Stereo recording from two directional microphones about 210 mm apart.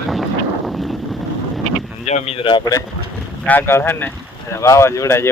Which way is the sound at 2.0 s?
30° left (ahead or behind).